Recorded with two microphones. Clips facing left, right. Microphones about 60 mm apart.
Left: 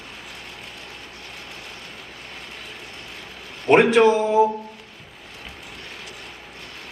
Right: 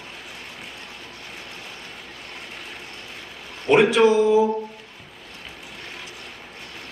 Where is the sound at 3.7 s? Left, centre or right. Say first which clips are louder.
Left 1 dB; left.